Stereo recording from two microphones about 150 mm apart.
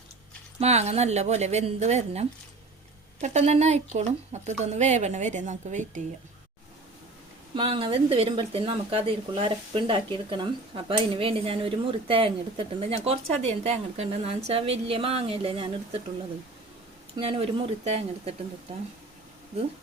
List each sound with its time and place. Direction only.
0.6 s speech: 45° right (ahead or behind)
7.5 s speech: 35° right (ahead or behind)
17.2 s speech: 40° right (ahead or behind)